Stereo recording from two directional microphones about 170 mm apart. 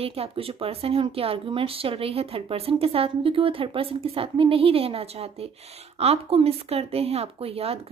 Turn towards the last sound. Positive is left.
turn(degrees=-35)  # may be behind; listen again after turning